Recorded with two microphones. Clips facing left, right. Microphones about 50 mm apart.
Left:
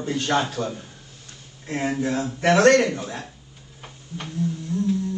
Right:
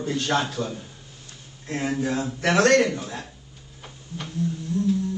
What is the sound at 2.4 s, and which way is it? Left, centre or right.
Speech, centre.